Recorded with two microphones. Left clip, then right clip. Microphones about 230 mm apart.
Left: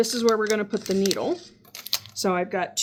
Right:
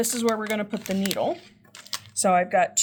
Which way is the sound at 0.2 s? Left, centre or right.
Right.